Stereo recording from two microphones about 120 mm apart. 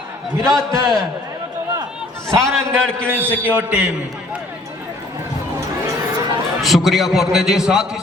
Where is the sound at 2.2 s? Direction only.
25° right (ahead or behind).